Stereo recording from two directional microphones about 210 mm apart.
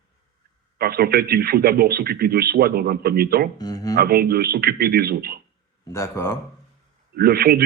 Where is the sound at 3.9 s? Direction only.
45° right (ahead or behind).